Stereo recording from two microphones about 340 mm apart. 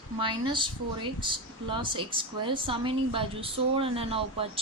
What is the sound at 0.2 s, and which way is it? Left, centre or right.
A woman's voice, centre.